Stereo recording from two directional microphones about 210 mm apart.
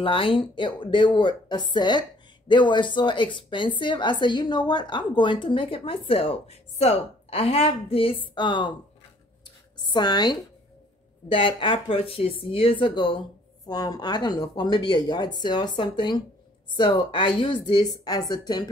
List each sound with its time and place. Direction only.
0.0 s speech: 25° left (ahead or behind)
9.8 s speech: 20° left (ahead or behind)